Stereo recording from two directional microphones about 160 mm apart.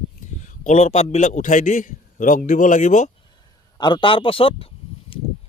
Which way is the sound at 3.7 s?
30° left (ahead or behind).